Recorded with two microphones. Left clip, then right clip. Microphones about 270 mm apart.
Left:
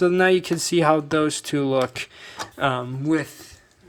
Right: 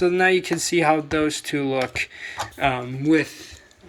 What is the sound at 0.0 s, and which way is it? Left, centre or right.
Speech, left.